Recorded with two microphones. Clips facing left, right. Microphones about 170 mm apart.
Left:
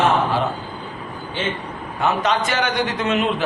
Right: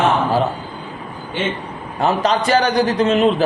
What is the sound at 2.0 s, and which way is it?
A man's voice, 35° right (ahead or behind).